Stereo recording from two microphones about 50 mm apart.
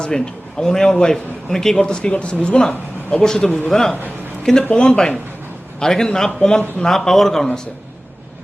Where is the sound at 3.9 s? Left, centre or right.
Right.